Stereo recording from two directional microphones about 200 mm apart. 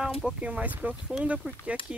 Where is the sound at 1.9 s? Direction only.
5° right (ahead or behind).